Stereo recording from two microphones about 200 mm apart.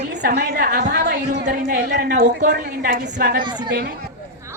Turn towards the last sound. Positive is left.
turn(degrees=-50)  # may be behind; listen again after turning